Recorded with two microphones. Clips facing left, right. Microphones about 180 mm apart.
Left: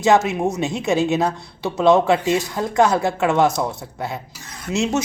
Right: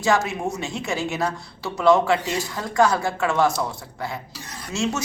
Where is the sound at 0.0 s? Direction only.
20° left (ahead or behind).